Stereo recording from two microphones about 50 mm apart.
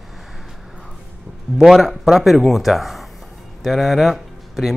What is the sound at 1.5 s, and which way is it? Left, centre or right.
Speech, centre.